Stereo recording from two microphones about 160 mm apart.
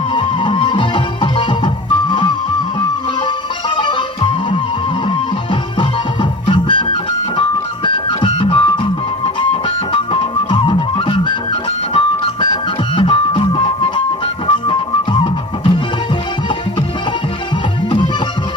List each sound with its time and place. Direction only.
0.1 s music: 30° left (ahead or behind)
3.8 s music: 30° left (ahead or behind)
17.8 s music: 30° left (ahead or behind)